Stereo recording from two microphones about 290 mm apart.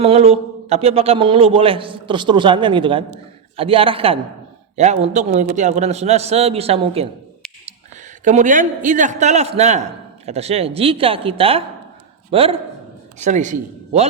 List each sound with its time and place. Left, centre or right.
0.0 s a man's voice: right
8.2 s a man's voice: right